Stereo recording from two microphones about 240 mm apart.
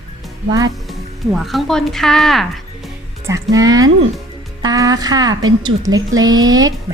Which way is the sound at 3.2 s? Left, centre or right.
Centre.